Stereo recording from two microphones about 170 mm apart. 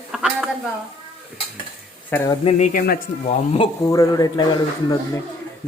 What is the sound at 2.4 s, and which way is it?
Speech, 35° left (ahead or behind).